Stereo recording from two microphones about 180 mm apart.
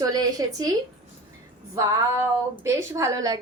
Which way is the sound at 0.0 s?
20° right (ahead or behind).